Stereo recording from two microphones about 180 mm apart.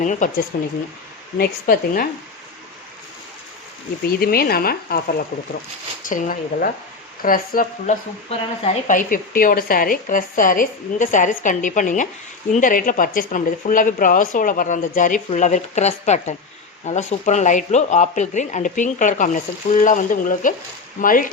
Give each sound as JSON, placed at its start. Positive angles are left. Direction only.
{"t": 0.0, "sound": "speech", "side_deg": 45}
{"t": 0.5, "sound": "speech", "side_deg": 55}
{"t": 4.0, "sound": "speech", "side_deg": 60}
{"t": 8.3, "sound": "speech", "side_deg": 40}